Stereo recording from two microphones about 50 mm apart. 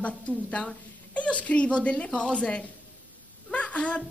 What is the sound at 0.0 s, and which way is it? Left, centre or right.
A woman's voice, left.